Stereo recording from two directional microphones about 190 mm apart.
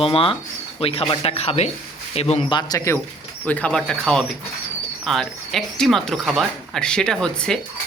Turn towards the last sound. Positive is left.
turn(degrees=5)  # may be behind; listen again after turning